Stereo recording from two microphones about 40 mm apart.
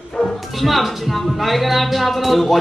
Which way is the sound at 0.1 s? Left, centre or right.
Centre.